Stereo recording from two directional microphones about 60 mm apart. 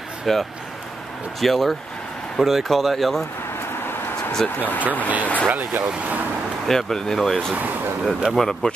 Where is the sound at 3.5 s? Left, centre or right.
Left.